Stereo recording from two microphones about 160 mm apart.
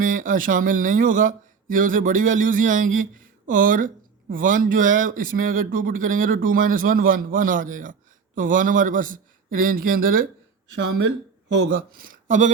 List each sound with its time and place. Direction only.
0.0 s speech: 55° right (ahead or behind)
11.5 s speech: 65° right (ahead or behind)